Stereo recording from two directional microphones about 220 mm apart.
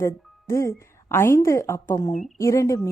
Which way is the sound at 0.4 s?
10° left (ahead or behind).